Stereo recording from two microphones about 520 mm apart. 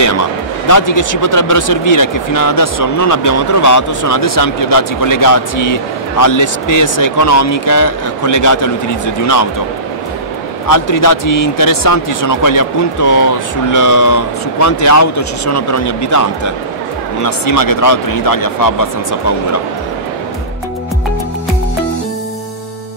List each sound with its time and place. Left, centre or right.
0.7 s speech: left
10.7 s speech: left
17.6 s speech: left